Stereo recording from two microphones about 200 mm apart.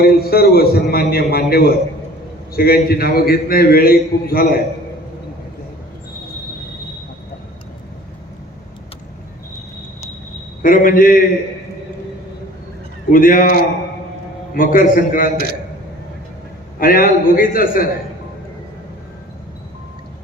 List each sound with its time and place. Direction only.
0.0 s a man's voice: 50° left (ahead or behind)
10.6 s a man's voice: 45° left (ahead or behind)
13.1 s a man's voice: 45° left (ahead or behind)
14.5 s a man's voice: 45° left (ahead or behind)
16.7 s a man's voice: 45° left (ahead or behind)